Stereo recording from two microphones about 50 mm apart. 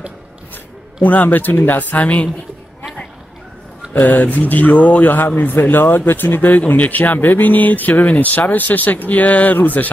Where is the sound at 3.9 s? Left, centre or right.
Left.